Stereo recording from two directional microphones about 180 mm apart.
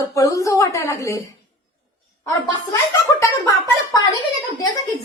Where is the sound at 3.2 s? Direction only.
20° left (ahead or behind).